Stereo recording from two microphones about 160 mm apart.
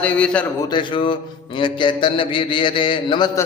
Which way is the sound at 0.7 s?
30° left (ahead or behind).